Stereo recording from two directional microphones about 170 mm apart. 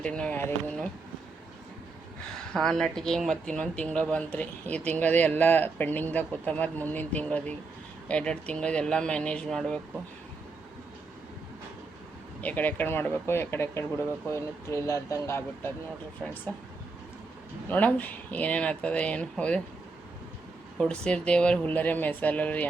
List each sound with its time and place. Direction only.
0.0 s speech: 5° left (ahead or behind)
2.5 s speech: centre (ahead or behind)
12.4 s speech: 10° left (ahead or behind)
16.2 s speech: 5° left (ahead or behind)
17.7 s speech: 10° left (ahead or behind)
20.7 s speech: 5° left (ahead or behind)